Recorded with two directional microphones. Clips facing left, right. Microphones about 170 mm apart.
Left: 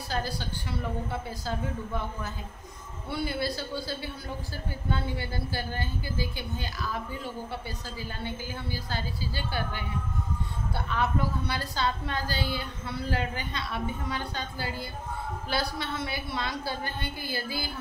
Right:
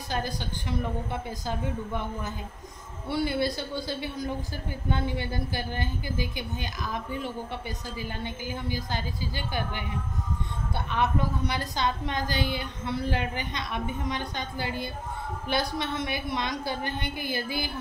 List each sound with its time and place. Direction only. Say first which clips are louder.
0.1 s a woman's voice: right 1 dB; 20° right (ahead or behind)
3.1 s a woman's voice: right 4 dB; 20° right (ahead or behind)
8.2 s a woman's voice: right 2 dB; 15° right (ahead or behind)
10.9 s a woman's voice: right 2 dB; 20° right (ahead or behind)